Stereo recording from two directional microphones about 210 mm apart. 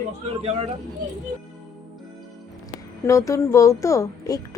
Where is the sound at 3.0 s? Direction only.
15° left (ahead or behind).